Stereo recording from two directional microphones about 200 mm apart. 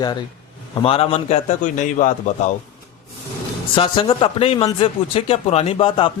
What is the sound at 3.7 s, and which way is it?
Speech, 25° left (ahead or behind).